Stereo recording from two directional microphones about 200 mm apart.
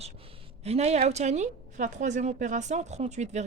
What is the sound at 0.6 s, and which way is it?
A woman's voice, 30° right (ahead or behind).